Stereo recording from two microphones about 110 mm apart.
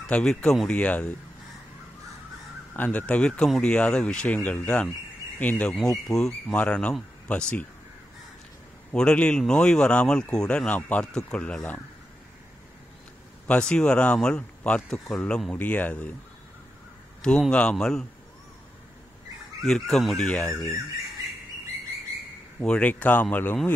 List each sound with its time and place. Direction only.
0.0 s speech: 10° left (ahead or behind)
2.7 s speech: 15° left (ahead or behind)
8.9 s speech: 10° left (ahead or behind)
13.5 s speech: 10° left (ahead or behind)
17.2 s speech: 5° left (ahead or behind)
19.6 s speech: 5° left (ahead or behind)
22.6 s speech: 10° left (ahead or behind)